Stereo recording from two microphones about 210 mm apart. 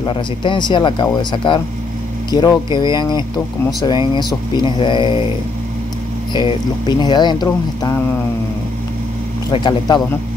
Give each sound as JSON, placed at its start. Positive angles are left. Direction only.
{"t": 0.0, "sound": "speech", "side_deg": 25}
{"t": 6.3, "sound": "speech", "side_deg": 20}
{"t": 9.5, "sound": "speech", "side_deg": 20}